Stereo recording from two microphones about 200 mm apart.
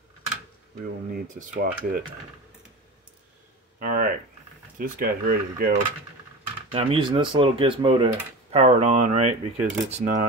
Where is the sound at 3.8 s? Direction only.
45° right (ahead or behind).